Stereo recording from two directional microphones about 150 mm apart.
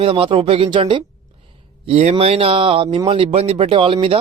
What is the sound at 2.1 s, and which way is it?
A man's voice, 40° right (ahead or behind).